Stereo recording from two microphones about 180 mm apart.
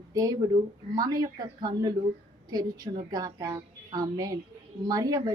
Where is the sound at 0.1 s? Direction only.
20° right (ahead or behind).